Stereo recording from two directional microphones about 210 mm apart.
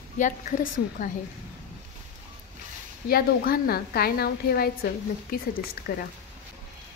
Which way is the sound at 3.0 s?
45° left (ahead or behind).